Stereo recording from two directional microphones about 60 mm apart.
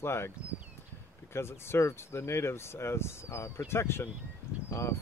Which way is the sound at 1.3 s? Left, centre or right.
Left.